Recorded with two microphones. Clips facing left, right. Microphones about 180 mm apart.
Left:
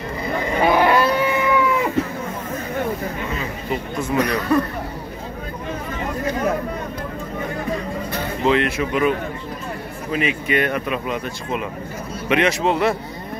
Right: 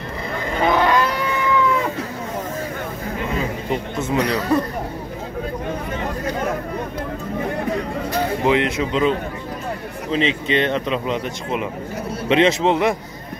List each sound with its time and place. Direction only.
0.6 s livestock: 10° left (ahead or behind)
4.0 s speech: 25° right (ahead or behind)
8.5 s speech: 20° right (ahead or behind)
10.1 s speech: 25° right (ahead or behind)